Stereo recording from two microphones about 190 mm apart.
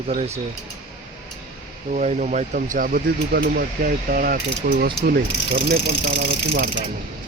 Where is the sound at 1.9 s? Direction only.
40° right (ahead or behind).